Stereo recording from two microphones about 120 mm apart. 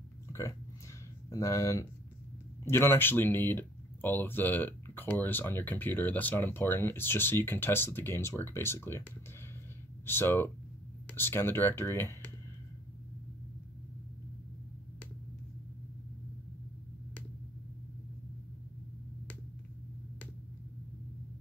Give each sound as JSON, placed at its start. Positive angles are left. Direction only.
{"t": 0.3, "sound": "a sound", "side_deg": 25}
{"t": 1.3, "sound": "speech", "side_deg": 25}
{"t": 10.0, "sound": "speech", "side_deg": 20}